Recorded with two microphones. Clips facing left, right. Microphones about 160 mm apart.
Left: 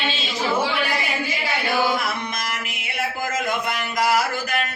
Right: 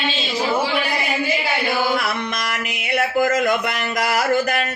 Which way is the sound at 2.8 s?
70° right (ahead or behind).